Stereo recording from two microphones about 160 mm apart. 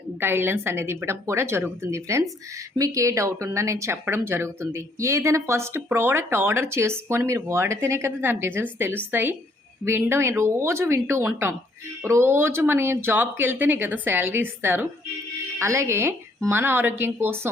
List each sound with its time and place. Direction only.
0.2 s speech: 15° right (ahead or behind)